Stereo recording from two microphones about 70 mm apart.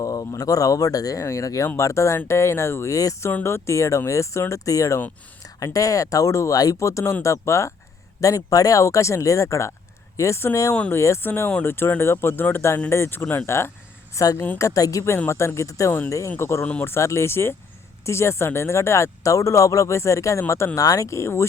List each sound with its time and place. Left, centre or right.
0.0 s speech: left
1.6 s speech: left
8.2 s speech: left
11.2 s speech: left
14.2 s speech: left
15.3 s speech: left